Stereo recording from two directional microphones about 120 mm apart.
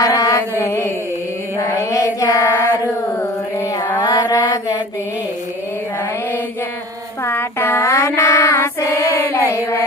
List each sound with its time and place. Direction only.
0.0 s mantra: 30° left (ahead or behind)
1.5 s child singing: 25° left (ahead or behind)
4.0 s mantra: 30° left (ahead or behind)
7.3 s child singing: 20° left (ahead or behind)